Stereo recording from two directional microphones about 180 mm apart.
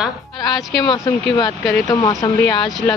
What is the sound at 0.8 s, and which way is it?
Speech, 20° left (ahead or behind).